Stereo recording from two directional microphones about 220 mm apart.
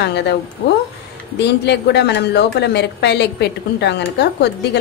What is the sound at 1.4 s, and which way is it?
A woman's voice, 50° left (ahead or behind).